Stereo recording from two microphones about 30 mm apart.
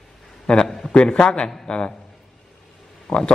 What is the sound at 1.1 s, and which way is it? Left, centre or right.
Speech, left.